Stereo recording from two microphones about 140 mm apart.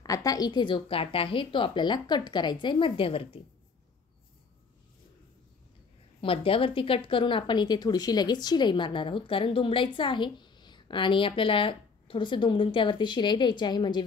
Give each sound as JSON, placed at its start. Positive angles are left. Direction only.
{"t": 0.0, "sound": "a woman's voice", "side_deg": 25}
{"t": 6.2, "sound": "a woman's voice", "side_deg": 40}